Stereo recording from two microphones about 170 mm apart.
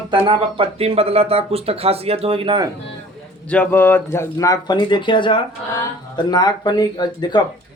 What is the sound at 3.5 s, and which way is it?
Speech, 10° left (ahead or behind).